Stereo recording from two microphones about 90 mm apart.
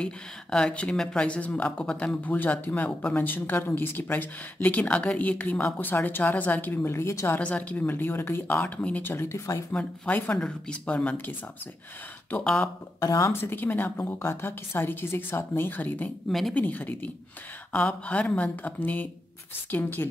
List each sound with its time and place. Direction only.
0.0 s speech: 10° left (ahead or behind); by 7.3 s 30° left (ahead or behind)
7.3 s speech: 15° left (ahead or behind); by 9.7 s 35° left (ahead or behind)
9.7 s speech: 15° left (ahead or behind)
13.0 s speech: 40° left (ahead or behind)
13.3 s speech: 25° left (ahead or behind)
16.3 s speech: centre (ahead or behind)
16.5 s speech: 20° left (ahead or behind)